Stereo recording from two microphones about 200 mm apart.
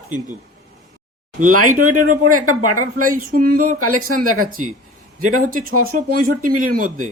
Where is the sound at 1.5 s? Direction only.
90° right.